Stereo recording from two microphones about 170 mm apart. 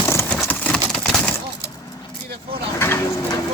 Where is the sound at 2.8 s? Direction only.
15° left (ahead or behind).